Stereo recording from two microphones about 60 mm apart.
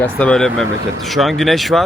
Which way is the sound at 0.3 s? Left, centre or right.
Centre.